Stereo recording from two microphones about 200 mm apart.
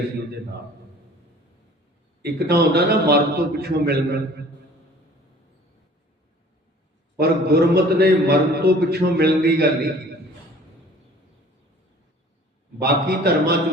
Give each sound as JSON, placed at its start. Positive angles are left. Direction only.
{"t": 2.2, "sound": "a man's voice", "side_deg": -55}
{"t": 7.2, "sound": "a man's voice", "side_deg": -50}
{"t": 12.8, "sound": "a man's voice", "side_deg": -50}